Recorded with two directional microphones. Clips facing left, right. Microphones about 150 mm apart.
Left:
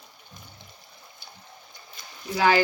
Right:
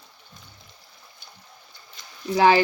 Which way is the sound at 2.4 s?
25° right (ahead or behind).